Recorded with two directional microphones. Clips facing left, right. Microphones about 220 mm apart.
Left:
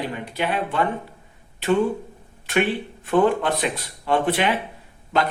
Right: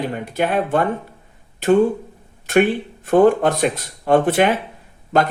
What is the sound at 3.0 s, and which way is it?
Speech, 45° right (ahead or behind).